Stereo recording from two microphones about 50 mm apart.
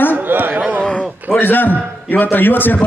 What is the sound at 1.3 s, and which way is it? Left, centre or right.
A man's voice, left.